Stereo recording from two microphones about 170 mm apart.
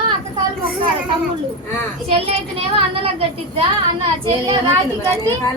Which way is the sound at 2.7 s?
30° right (ahead or behind).